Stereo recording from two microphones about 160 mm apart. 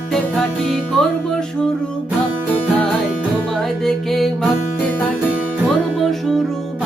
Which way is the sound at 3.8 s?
Centre (ahead or behind).